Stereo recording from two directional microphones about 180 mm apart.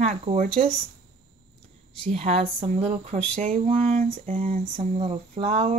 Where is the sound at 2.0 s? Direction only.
35° right (ahead or behind).